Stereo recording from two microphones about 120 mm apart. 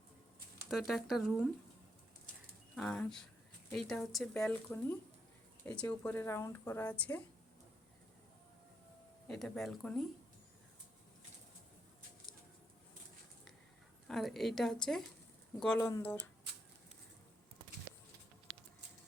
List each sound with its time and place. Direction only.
0.7 s a woman's voice: centre (ahead or behind)
2.7 s a woman's voice: 5° left (ahead or behind)
4.4 s speech: 20° left (ahead or behind)
9.2 s a woman's voice: 5° left (ahead or behind)
14.1 s a woman's voice: centre (ahead or behind)
15.9 s speech: 20° left (ahead or behind)